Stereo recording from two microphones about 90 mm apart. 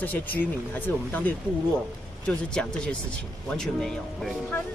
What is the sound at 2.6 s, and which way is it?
Speech, 10° left (ahead or behind).